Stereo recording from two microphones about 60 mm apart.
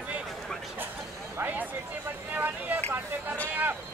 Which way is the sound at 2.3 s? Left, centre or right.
Right.